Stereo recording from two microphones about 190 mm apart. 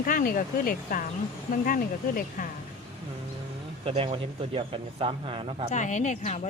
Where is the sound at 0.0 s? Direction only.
50° left (ahead or behind).